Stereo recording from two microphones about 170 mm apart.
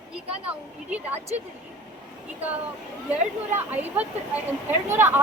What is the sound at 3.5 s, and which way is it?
Speech, 10° right (ahead or behind).